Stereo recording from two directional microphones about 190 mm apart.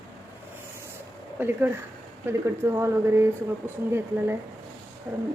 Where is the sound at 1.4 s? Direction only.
10° right (ahead or behind).